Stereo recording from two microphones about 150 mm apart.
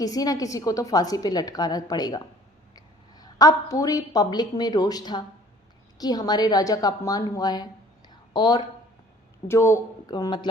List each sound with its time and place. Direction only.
0.0 s a woman's voice: 25° left (ahead or behind)
9.5 s a woman's voice: 20° left (ahead or behind)